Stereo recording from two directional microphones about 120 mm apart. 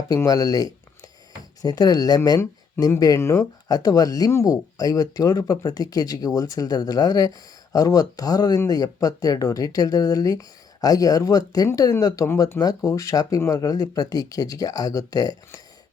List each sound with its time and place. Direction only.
0.2 s speech: 30° left (ahead or behind)